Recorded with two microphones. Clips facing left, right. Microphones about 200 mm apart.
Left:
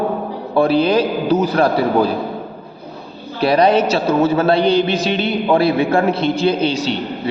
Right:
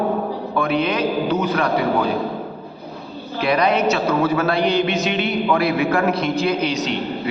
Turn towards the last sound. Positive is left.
turn(degrees=30)  # may be behind; listen again after turning